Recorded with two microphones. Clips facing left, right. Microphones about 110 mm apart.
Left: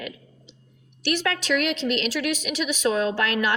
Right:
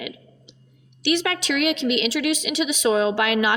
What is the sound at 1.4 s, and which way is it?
A woman's voice, 70° right (ahead or behind).